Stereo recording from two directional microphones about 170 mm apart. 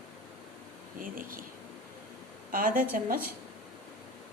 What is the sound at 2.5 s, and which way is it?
Speech, 55° right (ahead or behind).